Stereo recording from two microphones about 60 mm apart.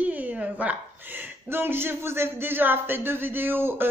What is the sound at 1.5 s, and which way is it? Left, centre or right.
Speech, right.